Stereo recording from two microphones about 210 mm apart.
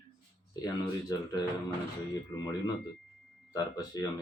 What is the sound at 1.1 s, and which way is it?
Speech, 20° left (ahead or behind).